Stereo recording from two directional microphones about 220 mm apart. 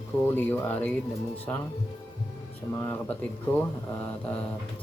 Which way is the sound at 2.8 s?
10° left (ahead or behind).